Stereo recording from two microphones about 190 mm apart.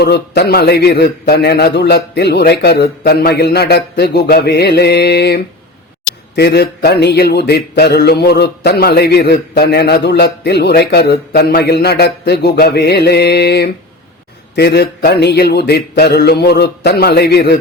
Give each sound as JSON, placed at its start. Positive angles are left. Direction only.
{"t": 0.0, "sound": "mantra", "side_deg": 60}